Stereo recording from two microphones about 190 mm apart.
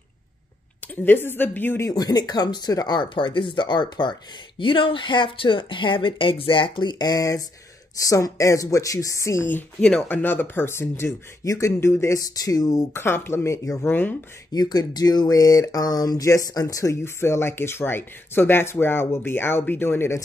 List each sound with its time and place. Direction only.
1.0 s speech: 10° left (ahead or behind)
14.5 s speech: 20° left (ahead or behind)